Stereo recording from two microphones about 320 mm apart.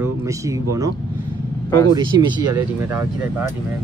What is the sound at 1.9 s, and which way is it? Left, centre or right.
Speech, centre.